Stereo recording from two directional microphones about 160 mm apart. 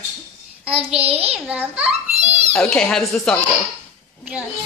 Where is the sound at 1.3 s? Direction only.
10° right (ahead or behind).